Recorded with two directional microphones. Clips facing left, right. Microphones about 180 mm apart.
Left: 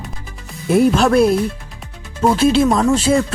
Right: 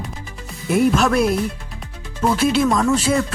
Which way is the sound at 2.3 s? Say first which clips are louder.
Left 3 dB; 30° left (ahead or behind).